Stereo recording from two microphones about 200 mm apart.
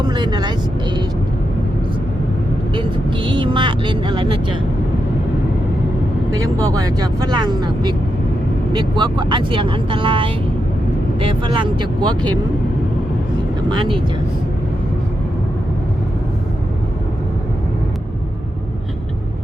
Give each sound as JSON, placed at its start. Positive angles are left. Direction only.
{"t": 0.1, "sound": "speech", "side_deg": -20}
{"t": 3.2, "sound": "speech", "side_deg": -25}
{"t": 6.3, "sound": "speech", "side_deg": -15}
{"t": 13.7, "sound": "speech", "side_deg": -25}